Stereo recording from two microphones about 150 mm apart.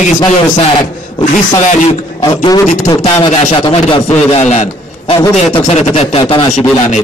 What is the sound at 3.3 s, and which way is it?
A man's voice, 45° left (ahead or behind).